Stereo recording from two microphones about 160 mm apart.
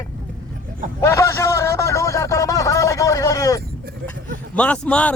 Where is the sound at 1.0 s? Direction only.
15° left (ahead or behind).